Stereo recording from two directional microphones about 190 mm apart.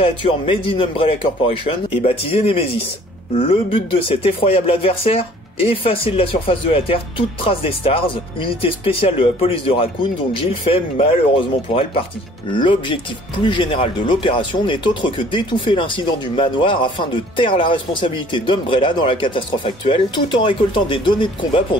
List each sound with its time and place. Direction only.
0.0 s speech: 30° left (ahead or behind)